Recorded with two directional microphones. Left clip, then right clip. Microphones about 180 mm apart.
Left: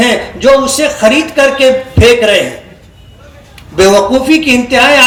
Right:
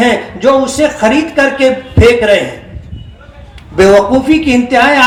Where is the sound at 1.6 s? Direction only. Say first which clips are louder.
Left 2 dB; 35° right (ahead or behind).